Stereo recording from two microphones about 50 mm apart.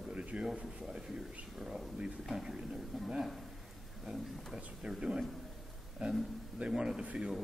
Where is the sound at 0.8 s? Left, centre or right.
Centre.